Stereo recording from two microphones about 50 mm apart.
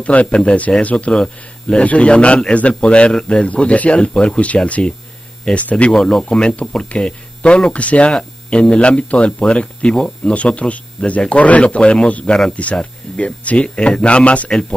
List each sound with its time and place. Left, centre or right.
0.0 s speech: left
5.9 s speech: centre
6.5 s speech: left
9.9 s speech: centre
10.3 s speech: left